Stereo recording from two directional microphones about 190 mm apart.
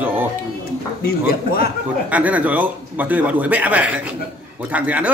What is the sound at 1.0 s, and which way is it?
Speech, 55° left (ahead or behind).